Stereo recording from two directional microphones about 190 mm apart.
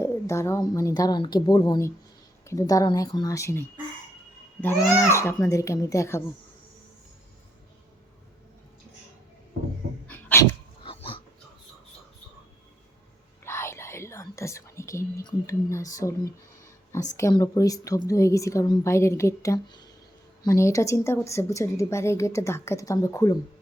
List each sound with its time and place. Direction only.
0.0 s a woman's voice: 15° left (ahead or behind)
4.9 s a woman's voice: 15° left (ahead or behind)
10.1 s dog: 10° left (ahead or behind)
10.8 s a sound: 30° left (ahead or behind)
13.4 s whispering: 15° left (ahead or behind)
15.4 s a woman's voice: 15° left (ahead or behind)
17.2 s a woman's voice: 15° left (ahead or behind)